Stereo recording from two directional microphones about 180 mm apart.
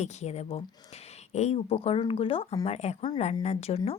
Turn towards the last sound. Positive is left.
turn(degrees=35)  # may be behind; listen again after turning